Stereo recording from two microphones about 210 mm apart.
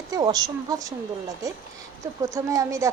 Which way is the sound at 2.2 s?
15° right (ahead or behind).